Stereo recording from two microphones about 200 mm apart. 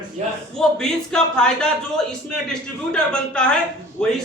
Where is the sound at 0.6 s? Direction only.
5° left (ahead or behind).